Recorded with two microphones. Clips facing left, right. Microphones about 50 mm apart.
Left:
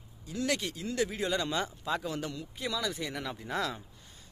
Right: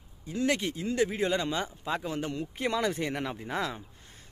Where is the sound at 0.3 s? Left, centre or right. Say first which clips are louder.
Right 4 dB; right.